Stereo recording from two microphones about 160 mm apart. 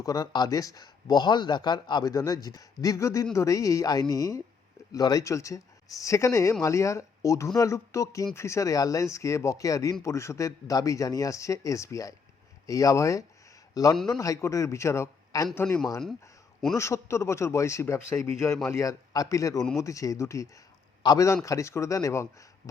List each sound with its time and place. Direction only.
0.0 s a man's voice: 20° left (ahead or behind)